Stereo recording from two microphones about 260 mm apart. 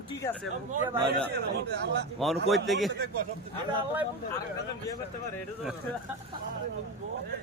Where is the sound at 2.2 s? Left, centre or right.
Centre.